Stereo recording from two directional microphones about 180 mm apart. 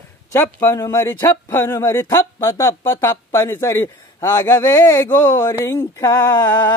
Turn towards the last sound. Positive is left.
turn(degrees=15)  # may be behind; listen again after turning